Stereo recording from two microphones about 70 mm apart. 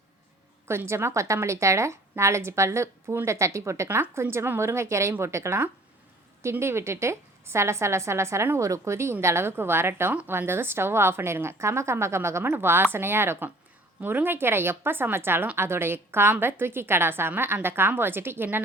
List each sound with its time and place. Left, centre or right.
0.7 s a woman's voice: right